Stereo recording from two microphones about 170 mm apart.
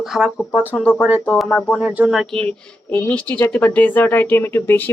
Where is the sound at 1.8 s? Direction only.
5° right (ahead or behind).